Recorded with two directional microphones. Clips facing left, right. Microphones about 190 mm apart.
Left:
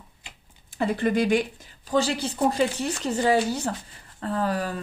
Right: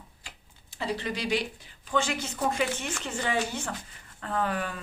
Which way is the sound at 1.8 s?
35° left (ahead or behind).